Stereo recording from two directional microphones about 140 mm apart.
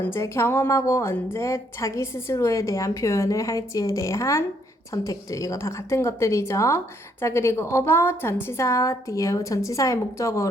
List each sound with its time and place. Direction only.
0.0 s speech: 15° left (ahead or behind)